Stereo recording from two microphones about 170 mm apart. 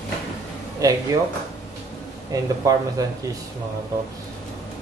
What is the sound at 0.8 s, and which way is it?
Speech, 20° right (ahead or behind).